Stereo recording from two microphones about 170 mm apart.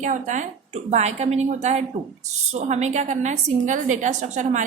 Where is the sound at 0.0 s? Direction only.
45° right (ahead or behind).